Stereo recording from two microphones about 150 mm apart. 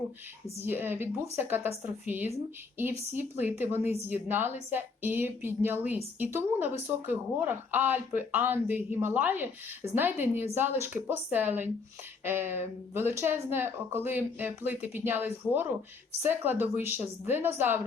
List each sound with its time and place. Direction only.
0.6 s speech: 15° right (ahead or behind)